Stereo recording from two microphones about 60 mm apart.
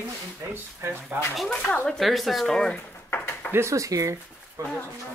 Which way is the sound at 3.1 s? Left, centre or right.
Left.